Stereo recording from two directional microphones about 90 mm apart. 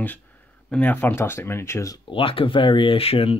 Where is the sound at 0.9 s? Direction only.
25° left (ahead or behind).